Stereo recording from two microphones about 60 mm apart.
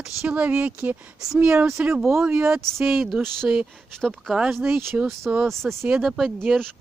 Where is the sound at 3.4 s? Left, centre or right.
Centre.